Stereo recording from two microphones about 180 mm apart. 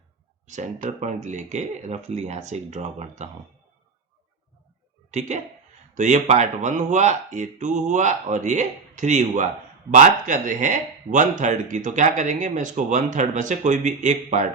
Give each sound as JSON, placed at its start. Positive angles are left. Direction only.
{"t": 0.4, "sound": "speech", "side_deg": -45}
{"t": 5.9, "sound": "speech", "side_deg": -40}